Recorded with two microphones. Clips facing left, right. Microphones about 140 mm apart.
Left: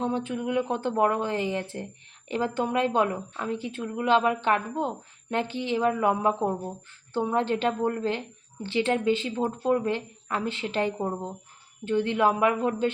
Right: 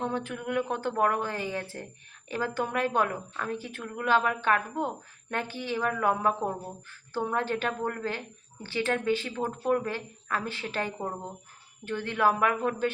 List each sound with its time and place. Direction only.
0.0 s a woman's voice: 20° left (ahead or behind)